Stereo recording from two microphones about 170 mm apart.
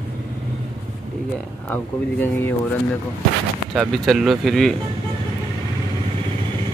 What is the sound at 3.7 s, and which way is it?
Speech, centre (ahead or behind).